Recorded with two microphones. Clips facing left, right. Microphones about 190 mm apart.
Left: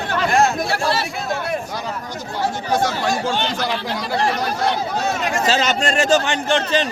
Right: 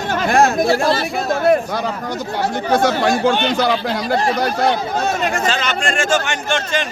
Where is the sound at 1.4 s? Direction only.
55° right (ahead or behind).